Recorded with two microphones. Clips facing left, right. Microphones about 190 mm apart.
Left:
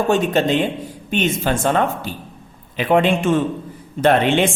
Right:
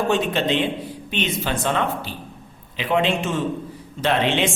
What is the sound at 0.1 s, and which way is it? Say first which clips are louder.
A woman's voice: left 4 dB; 45° left (ahead or behind).